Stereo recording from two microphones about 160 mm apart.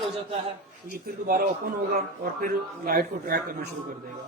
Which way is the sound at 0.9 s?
65° right (ahead or behind).